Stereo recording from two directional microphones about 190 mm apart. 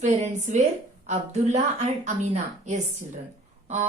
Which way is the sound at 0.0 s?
40° right (ahead or behind).